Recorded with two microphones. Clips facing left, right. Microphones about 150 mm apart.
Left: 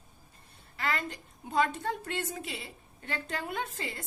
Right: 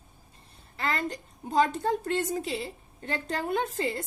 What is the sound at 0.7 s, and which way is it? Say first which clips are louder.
A woman's voice: right 3 dB; 35° right (ahead or behind).